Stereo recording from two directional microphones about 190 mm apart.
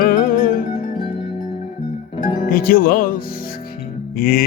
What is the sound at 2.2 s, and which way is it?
Speech, 45° left (ahead or behind).